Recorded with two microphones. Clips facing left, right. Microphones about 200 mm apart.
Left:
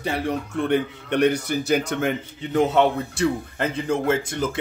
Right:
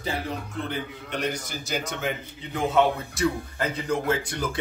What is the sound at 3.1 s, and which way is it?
Speech, 25° left (ahead or behind).